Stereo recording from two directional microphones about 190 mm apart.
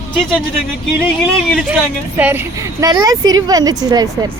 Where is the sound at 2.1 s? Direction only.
10° right (ahead or behind).